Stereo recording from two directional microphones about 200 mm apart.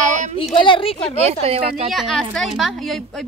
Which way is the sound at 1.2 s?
30° right (ahead or behind).